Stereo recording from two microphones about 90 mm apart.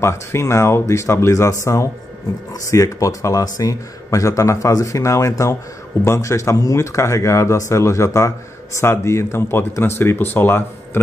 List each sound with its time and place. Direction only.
0.0 s speech: 30° left (ahead or behind)